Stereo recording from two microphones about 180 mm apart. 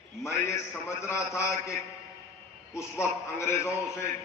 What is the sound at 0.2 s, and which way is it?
A man's voice, 15° left (ahead or behind).